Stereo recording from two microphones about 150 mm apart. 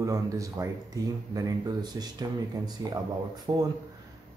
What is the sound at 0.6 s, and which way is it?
Speech, 25° right (ahead or behind).